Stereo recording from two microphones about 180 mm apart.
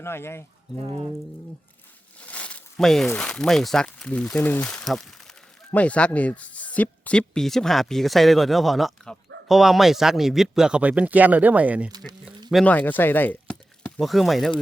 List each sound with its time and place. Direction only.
0.0 s speech: 15° left (ahead or behind)
0.8 s speech: 30° right (ahead or behind)
2.2 s speech: 5° left (ahead or behind); by 11.9 s 10° right (ahead or behind)
12.6 s speech: 10° left (ahead or behind)